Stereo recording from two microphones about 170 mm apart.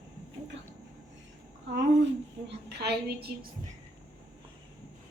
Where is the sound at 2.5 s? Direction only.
75° right (ahead or behind).